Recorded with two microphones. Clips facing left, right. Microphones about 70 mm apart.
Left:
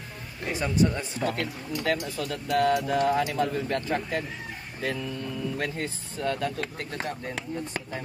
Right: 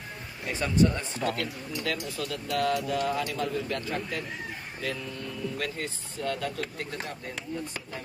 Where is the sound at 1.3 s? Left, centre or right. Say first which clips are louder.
Left 2 dB; left.